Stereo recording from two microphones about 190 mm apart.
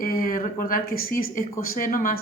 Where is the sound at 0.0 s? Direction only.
50° left (ahead or behind).